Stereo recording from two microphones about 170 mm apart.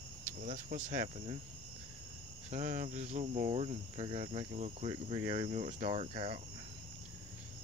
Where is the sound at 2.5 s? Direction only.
45° right (ahead or behind).